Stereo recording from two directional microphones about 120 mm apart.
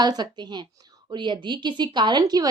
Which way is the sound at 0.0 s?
35° right (ahead or behind).